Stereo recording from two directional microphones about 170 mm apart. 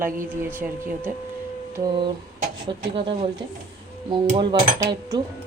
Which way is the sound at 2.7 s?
30° right (ahead or behind).